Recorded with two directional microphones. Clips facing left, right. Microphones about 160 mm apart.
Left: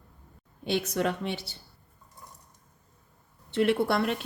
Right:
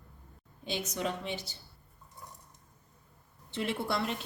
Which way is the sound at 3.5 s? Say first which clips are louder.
Left 9 dB; 60° left (ahead or behind).